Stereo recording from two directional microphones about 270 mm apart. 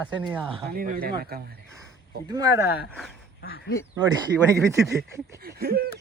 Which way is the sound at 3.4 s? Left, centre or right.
Left.